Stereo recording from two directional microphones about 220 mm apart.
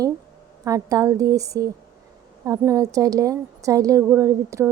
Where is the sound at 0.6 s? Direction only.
15° right (ahead or behind).